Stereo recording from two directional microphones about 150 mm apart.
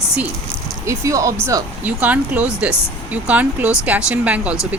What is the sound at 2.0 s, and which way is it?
Speech, 10° right (ahead or behind).